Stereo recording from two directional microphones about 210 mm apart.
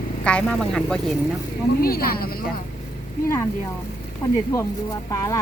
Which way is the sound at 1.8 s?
45° left (ahead or behind).